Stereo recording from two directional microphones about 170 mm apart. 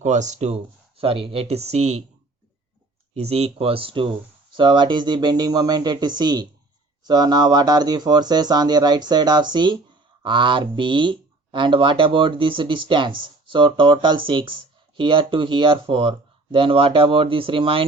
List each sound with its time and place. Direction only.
0.0 s speech: 45° right (ahead or behind)
3.2 s speech: 35° right (ahead or behind)